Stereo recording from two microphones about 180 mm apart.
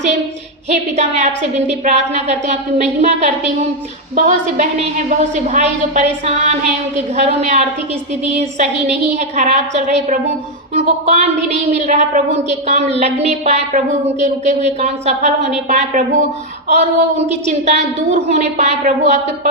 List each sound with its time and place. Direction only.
0.7 s a woman's voice: 40° right (ahead or behind)